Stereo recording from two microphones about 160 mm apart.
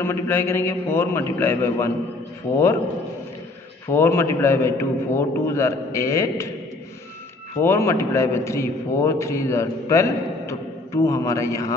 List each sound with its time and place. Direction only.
0.0 s a man's voice: 15° left (ahead or behind)
3.9 s a man's voice: 15° left (ahead or behind)
7.5 s a man's voice: 15° left (ahead or behind)